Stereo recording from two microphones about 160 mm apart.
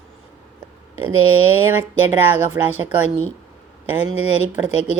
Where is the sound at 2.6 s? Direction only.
15° right (ahead or behind).